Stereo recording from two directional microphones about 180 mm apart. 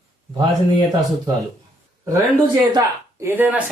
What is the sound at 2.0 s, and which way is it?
Speech, 20° right (ahead or behind).